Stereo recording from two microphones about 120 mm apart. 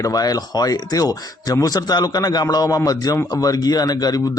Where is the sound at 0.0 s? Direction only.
30° left (ahead or behind).